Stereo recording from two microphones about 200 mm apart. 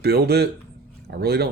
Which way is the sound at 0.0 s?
55° right (ahead or behind).